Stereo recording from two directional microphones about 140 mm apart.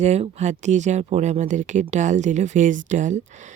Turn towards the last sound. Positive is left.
turn(degrees=-65)  # may be behind; listen again after turning